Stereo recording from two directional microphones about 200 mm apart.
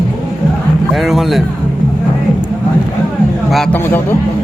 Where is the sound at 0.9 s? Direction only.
Centre (ahead or behind).